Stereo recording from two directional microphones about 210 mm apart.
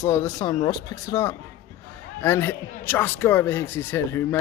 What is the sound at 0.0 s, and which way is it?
A man's voice, 15° left (ahead or behind).